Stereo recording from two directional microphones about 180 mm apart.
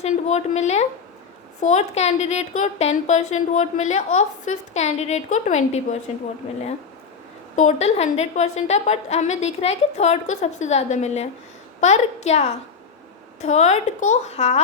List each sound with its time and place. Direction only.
0.0 s a woman's voice: 40° left (ahead or behind)
7.5 s a woman's voice: 45° left (ahead or behind)